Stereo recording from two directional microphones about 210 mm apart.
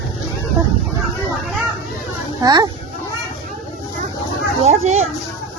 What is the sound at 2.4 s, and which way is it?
Speech, 20° right (ahead or behind).